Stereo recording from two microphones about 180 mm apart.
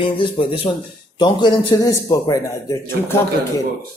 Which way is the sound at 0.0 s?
30° left (ahead or behind).